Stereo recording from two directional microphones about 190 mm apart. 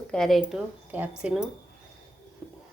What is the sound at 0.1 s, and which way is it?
Speech, centre (ahead or behind).